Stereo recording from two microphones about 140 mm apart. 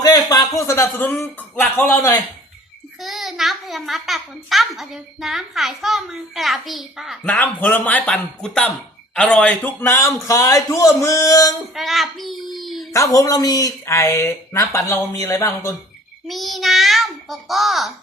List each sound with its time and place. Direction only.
0.0 s speech: 25° left (ahead or behind)
3.0 s a child's voice: centre (ahead or behind)
7.3 s speech: 10° left (ahead or behind)
9.8 s speech: 20° left (ahead or behind)
11.7 s a child's voice: centre (ahead or behind)
12.5 s a sound: centre (ahead or behind)
12.9 s speech: 25° left (ahead or behind)
16.2 s a child's voice: centre (ahead or behind)